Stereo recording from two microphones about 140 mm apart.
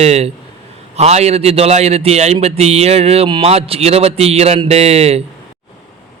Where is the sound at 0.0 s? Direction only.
50° right (ahead or behind).